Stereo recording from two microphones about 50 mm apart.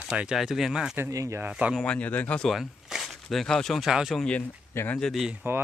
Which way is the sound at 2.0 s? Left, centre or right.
Left.